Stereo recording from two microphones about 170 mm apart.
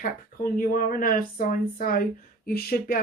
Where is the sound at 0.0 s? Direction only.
55° left (ahead or behind).